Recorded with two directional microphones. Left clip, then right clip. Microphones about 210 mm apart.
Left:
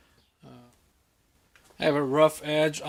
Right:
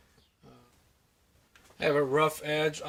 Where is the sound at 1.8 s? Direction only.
50° left (ahead or behind).